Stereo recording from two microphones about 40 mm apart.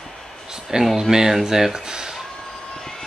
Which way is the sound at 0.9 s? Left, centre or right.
Centre.